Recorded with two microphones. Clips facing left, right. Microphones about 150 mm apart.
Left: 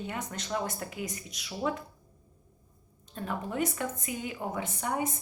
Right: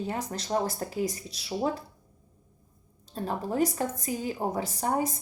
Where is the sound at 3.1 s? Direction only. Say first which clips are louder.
Right 4 dB; 35° right (ahead or behind).